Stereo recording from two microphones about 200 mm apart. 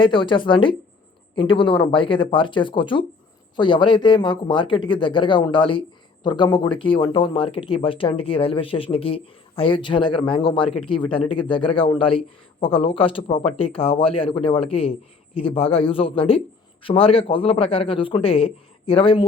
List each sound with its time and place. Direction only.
0.0 s speech: 25° left (ahead or behind)